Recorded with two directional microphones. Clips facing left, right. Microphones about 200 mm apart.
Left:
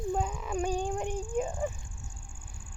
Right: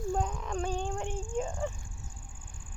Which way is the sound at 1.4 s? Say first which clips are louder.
Left 2 dB; 15° left (ahead or behind).